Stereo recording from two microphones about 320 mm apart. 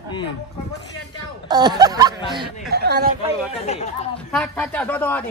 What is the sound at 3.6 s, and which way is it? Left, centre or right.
Speech, left.